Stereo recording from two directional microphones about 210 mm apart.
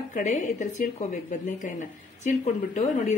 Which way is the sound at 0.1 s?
35° left (ahead or behind).